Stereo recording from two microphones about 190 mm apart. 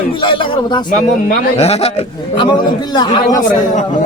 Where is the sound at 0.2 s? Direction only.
25° left (ahead or behind).